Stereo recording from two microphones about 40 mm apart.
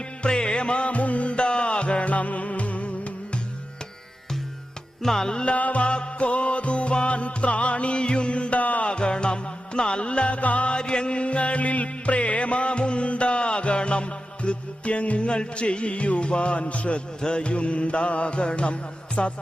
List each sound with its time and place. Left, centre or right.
0.2 s music: left
5.0 s music: centre
5.5 s music: left
8.9 s music: left
17.2 s music: left